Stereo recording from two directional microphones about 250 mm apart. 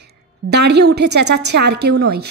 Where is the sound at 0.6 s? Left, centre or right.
Right.